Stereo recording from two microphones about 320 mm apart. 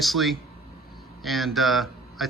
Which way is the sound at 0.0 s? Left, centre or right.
Centre.